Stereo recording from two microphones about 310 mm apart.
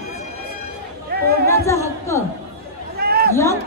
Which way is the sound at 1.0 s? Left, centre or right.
Right.